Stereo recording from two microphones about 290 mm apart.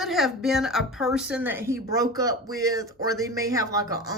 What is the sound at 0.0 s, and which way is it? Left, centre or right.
A woman's voice, centre.